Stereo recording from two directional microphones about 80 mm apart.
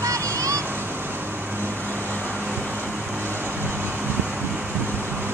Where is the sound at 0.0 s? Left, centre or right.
Right.